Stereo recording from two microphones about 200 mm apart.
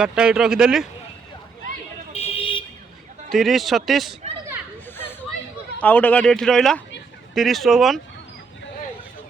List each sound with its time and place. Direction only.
0.0 s speech: 5° right (ahead or behind)
2.1 s vehicle: 30° left (ahead or behind)
3.3 s speech: centre (ahead or behind)
5.8 s speech: 10° left (ahead or behind)